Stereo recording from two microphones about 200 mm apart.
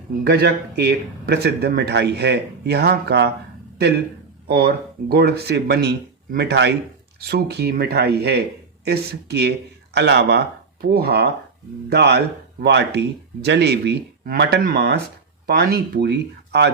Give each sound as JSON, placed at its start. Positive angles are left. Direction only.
{"t": 0.3, "sound": "speech", "side_deg": -55}